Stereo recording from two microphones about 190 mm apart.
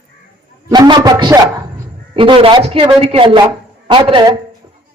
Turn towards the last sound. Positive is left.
turn(degrees=-25)  # may be behind; listen again after turning